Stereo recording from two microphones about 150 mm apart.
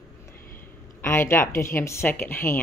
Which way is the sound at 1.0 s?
15° left (ahead or behind).